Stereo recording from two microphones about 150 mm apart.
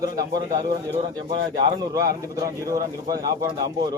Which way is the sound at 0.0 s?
25° right (ahead or behind).